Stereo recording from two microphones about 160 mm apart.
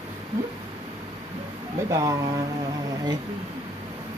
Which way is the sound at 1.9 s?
20° right (ahead or behind).